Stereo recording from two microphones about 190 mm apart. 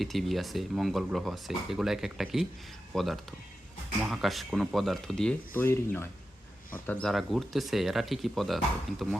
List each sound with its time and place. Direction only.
0.0 s speech: centre (ahead or behind)